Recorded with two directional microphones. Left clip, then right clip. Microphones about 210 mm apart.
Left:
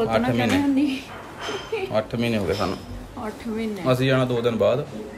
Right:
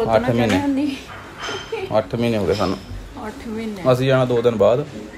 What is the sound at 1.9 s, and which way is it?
Speech, centre (ahead or behind).